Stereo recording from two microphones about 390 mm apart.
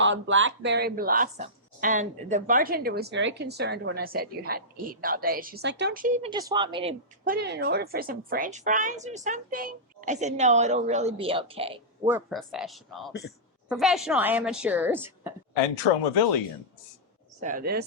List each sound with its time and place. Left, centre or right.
0.0 s a woman's voice: right; by 15.3 s centre
15.7 s speech: left
17.4 s speech: right